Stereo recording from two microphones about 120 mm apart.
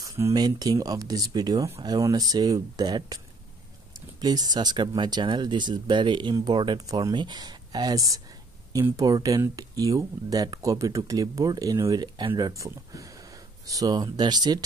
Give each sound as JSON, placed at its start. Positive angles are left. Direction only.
{"t": 0.0, "sound": "speech", "side_deg": -30}
{"t": 4.2, "sound": "speech", "side_deg": -35}